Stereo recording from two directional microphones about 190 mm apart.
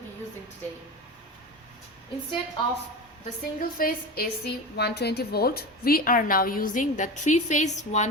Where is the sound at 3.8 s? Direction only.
55° left (ahead or behind).